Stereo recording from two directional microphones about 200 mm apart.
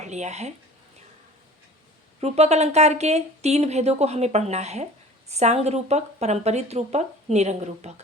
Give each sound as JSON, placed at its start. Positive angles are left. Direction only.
{"t": 0.0, "sound": "speech", "side_deg": -35}
{"t": 2.2, "sound": "speech", "side_deg": -35}